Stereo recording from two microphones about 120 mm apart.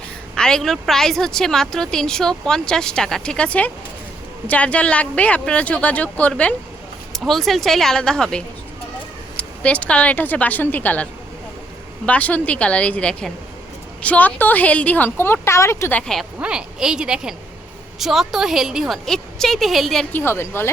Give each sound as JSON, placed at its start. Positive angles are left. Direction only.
{"t": 0.3, "sound": "a woman's voice", "side_deg": 5}
{"t": 16.0, "sound": "a woman's voice", "side_deg": 5}
{"t": 16.4, "sound": "a woman's voice", "side_deg": -5}
{"t": 20.1, "sound": "a woman's voice", "side_deg": 20}